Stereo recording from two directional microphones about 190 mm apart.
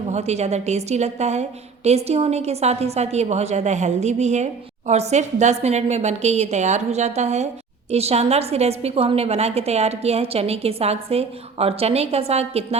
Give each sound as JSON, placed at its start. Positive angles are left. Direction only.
{"t": 0.1, "sound": "a woman's voice", "side_deg": -35}